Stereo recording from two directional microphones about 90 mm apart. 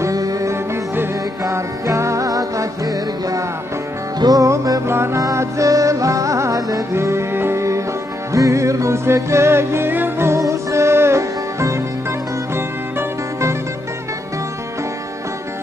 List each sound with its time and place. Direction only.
0.0 s music: 40° right (ahead or behind)
4.8 s music: 30° right (ahead or behind)